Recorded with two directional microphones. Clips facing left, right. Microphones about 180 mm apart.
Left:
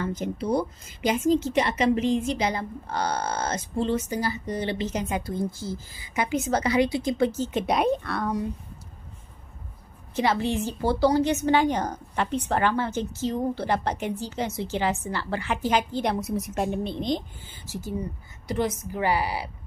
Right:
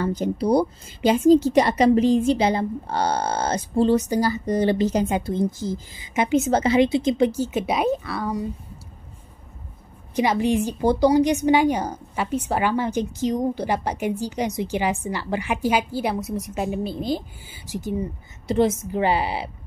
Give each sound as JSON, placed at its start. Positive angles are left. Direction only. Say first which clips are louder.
{"t": 0.0, "sound": "a woman's voice", "louder": "right 6 dB", "side_deg": -35}
{"t": 10.1, "sound": "a woman's voice", "louder": "right 4 dB", "side_deg": -15}